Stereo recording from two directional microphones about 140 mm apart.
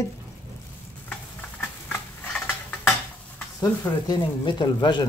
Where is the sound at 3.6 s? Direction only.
30° left (ahead or behind).